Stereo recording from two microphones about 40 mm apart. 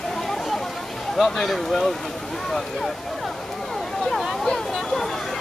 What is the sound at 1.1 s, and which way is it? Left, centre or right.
Speech, centre.